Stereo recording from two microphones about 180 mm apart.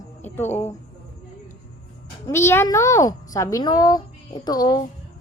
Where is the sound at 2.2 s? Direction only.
15° left (ahead or behind).